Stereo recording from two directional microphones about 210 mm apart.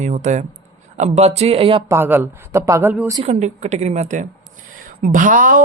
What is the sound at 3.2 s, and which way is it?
A woman's voice, 30° right (ahead or behind).